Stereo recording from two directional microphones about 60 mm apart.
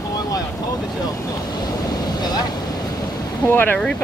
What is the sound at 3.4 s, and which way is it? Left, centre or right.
Speech, left.